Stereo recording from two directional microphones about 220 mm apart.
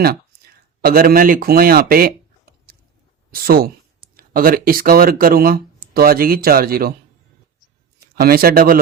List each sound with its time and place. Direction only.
0.3 s a sound: 45° right (ahead or behind)
0.8 s speech: 40° right (ahead or behind)
7.9 s speech: 45° right (ahead or behind)